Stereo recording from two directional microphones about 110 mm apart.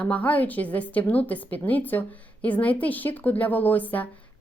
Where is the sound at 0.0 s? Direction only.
15° left (ahead or behind).